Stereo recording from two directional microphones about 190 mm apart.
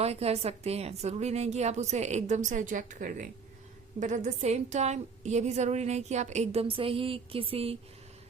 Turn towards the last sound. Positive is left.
turn(degrees=-30)  # may be behind; listen again after turning